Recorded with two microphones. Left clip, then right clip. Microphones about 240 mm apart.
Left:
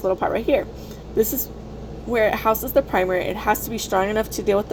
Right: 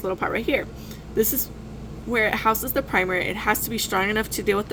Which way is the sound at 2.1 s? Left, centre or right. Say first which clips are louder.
Left 2 dB; right.